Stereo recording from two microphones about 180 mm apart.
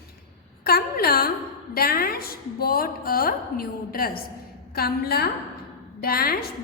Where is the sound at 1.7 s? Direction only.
55° left (ahead or behind).